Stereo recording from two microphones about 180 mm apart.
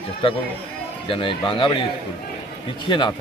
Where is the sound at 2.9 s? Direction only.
25° left (ahead or behind).